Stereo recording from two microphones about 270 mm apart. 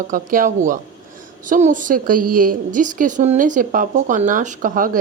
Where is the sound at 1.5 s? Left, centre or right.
Right.